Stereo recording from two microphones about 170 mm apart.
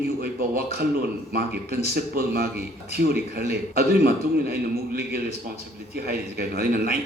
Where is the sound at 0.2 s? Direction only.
60° right (ahead or behind).